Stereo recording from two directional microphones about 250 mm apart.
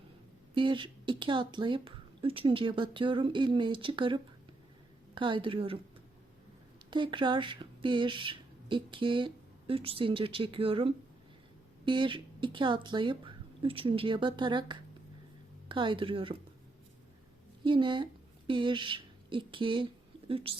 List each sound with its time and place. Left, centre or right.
0.5 s speech: centre
6.9 s speech: centre
17.7 s speech: centre